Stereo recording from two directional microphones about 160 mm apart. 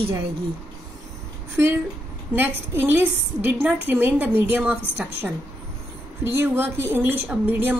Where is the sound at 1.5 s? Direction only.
15° right (ahead or behind).